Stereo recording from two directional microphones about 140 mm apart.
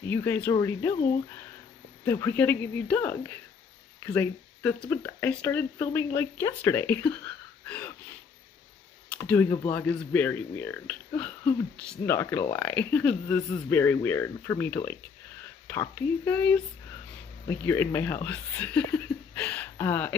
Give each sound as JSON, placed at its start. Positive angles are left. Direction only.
{"t": 0.0, "sound": "speech", "side_deg": 15}
{"t": 2.0, "sound": "speech", "side_deg": 15}
{"t": 7.6, "sound": "a sound", "side_deg": 10}
{"t": 9.3, "sound": "speech", "side_deg": 15}